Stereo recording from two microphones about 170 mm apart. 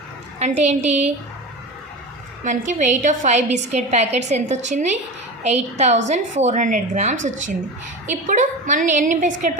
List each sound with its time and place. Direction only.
0.3 s a woman's voice: 40° right (ahead or behind)
2.4 s a woman's voice: 45° right (ahead or behind)